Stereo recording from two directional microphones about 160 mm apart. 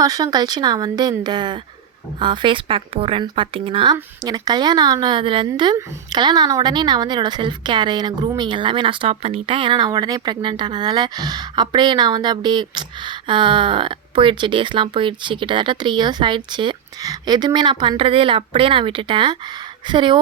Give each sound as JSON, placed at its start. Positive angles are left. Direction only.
{"t": 0.0, "sound": "a woman's voice", "side_deg": -25}